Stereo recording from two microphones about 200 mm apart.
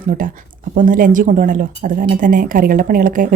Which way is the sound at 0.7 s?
40° right (ahead or behind).